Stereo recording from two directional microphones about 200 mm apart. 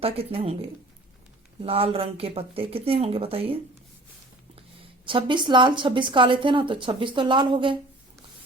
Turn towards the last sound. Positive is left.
turn(degrees=-25)  # may be behind; listen again after turning